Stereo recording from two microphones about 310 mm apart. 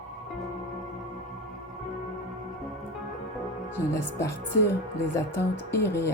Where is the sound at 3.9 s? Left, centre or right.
Centre.